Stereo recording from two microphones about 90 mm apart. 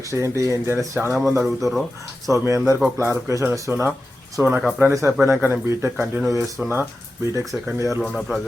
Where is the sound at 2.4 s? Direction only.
30° right (ahead or behind).